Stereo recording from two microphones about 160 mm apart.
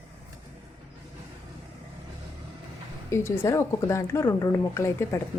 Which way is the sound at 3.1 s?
15° left (ahead or behind).